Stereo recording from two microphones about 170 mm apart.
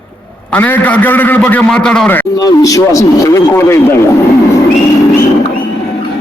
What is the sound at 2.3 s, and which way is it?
Speech, 20° left (ahead or behind).